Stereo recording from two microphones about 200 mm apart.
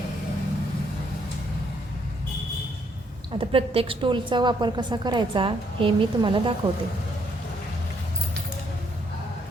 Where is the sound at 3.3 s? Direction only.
25° right (ahead or behind).